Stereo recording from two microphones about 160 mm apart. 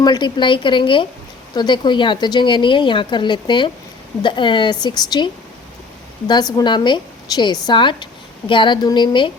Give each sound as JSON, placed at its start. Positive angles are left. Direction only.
{"t": 0.0, "sound": "a woman's voice", "side_deg": 25}